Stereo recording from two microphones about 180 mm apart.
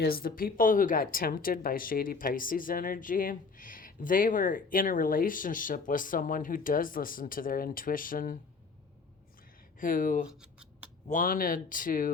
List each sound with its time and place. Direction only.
0.0 s speech: 55° left (ahead or behind)
9.8 s speech: 50° left (ahead or behind)
10.2 s scratch: 5° right (ahead or behind)
11.1 s speech: 50° left (ahead or behind)